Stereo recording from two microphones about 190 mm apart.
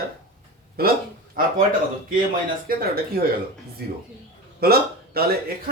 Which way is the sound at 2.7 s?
50° right (ahead or behind).